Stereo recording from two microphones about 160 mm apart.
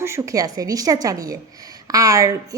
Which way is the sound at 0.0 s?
20° right (ahead or behind).